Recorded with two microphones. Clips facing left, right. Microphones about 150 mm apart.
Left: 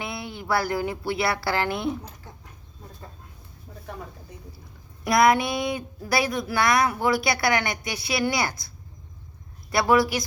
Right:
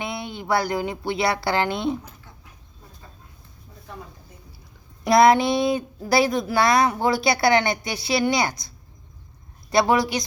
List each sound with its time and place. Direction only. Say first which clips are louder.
0.0 s speech: right 3 dB; 20° right (ahead or behind)
5.0 s speech: right 4 dB; 25° right (ahead or behind)